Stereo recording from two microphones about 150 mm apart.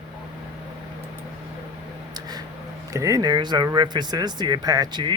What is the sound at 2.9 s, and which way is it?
Speech, 20° right (ahead or behind).